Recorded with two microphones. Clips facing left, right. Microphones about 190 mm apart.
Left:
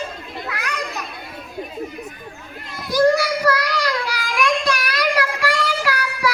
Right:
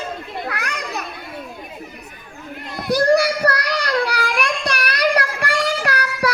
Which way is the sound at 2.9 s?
60° right (ahead or behind).